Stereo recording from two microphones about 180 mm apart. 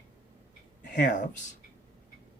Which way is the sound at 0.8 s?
45° left (ahead or behind).